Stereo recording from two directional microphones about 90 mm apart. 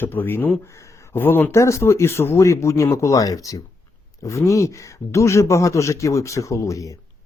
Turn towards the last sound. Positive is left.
turn(degrees=35)  # may be behind; listen again after turning